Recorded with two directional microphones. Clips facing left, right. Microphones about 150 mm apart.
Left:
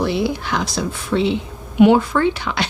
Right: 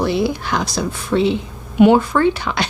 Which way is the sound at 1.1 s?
40° right (ahead or behind).